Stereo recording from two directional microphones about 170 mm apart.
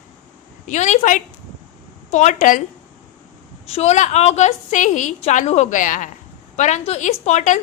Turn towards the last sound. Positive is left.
turn(degrees=45)  # may be behind; listen again after turning